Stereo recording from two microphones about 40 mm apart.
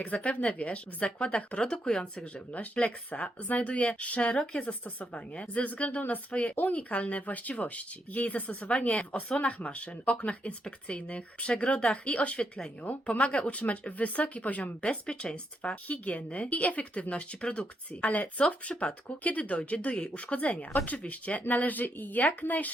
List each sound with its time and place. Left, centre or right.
0.0 s speech: left
2.1 s speech: left
15.0 s speech: left
15.7 s speech: left
18.3 s speech: left